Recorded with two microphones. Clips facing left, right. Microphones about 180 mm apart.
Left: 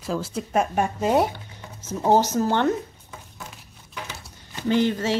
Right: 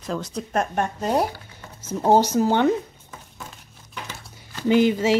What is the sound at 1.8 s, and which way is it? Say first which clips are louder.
Speech: right 2 dB; 10° right (ahead or behind).